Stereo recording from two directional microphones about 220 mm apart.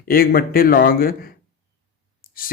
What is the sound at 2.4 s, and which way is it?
Speech, 40° left (ahead or behind).